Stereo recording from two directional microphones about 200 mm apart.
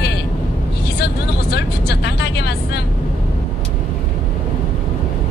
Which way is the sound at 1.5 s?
55° left (ahead or behind).